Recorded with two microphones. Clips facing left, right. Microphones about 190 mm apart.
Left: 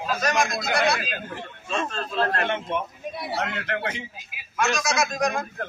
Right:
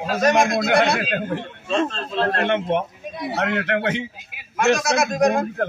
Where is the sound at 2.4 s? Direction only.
65° right (ahead or behind).